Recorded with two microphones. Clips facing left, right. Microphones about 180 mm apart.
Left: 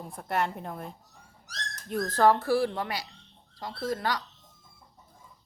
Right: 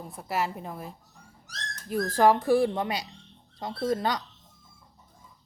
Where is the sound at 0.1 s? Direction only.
5° right (ahead or behind); by 4.2 s 20° right (ahead or behind).